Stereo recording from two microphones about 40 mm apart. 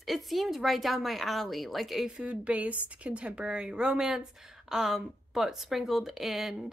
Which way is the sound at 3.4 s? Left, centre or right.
Right.